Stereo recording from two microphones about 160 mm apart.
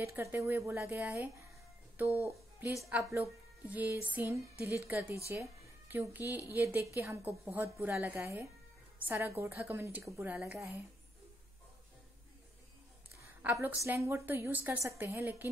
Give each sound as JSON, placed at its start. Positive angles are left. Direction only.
{"t": 0.0, "sound": "a woman's voice", "side_deg": -15}
{"t": 13.4, "sound": "a woman's voice", "side_deg": -10}